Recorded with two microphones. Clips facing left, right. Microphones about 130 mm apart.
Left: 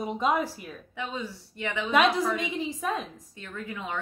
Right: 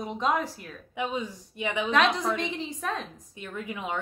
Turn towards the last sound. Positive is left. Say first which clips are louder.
# right 2 dB
turn(degrees=-15)  # may be behind; listen again after turning